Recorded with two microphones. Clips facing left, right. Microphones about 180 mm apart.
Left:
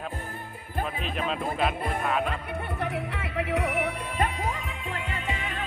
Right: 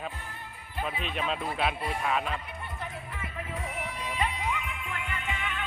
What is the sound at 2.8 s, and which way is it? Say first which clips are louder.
Music: left 8 dB; 75° left (ahead or behind).